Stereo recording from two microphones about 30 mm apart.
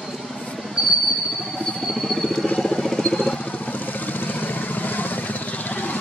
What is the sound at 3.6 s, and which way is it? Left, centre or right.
Vehicle, left.